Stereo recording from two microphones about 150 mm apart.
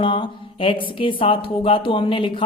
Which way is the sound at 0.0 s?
35° left (ahead or behind).